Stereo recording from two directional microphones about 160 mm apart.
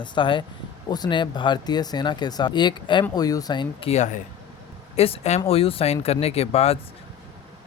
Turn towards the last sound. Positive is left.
turn(degrees=40)  # may be behind; listen again after turning